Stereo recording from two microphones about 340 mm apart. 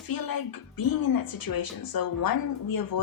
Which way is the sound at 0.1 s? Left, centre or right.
Left.